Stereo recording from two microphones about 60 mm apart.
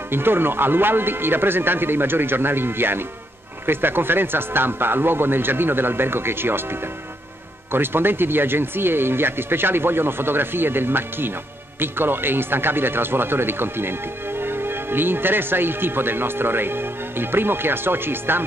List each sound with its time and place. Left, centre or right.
0.1 s speech: right